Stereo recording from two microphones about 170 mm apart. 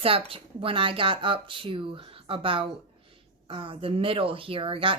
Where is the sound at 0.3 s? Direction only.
30° right (ahead or behind).